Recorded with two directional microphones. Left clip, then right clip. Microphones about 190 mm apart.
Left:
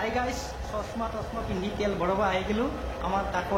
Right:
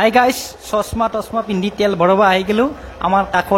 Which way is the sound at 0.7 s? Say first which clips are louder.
Right 16 dB; 50° right (ahead or behind).